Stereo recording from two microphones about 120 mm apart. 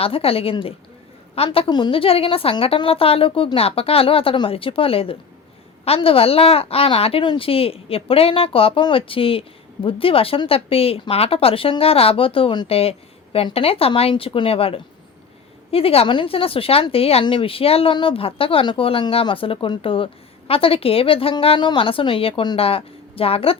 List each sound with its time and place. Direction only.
0.0 s speech: 50° left (ahead or behind)
1.5 s speech: 45° left (ahead or behind)